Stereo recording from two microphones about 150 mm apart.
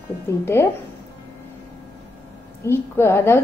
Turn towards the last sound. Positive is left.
turn(degrees=15)  # may be behind; listen again after turning